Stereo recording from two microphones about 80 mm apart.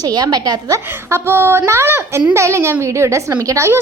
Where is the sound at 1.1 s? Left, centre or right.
Right.